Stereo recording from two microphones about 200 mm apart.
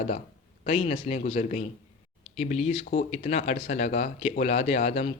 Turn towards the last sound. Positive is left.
turn(degrees=30)  # may be behind; listen again after turning